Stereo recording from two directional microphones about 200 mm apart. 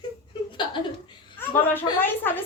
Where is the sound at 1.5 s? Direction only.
10° left (ahead or behind).